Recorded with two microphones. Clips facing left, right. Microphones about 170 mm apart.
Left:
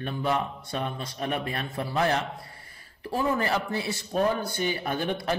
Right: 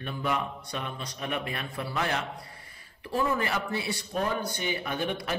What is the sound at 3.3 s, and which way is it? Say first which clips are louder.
Speech: left 3 dB; 35° left (ahead or behind).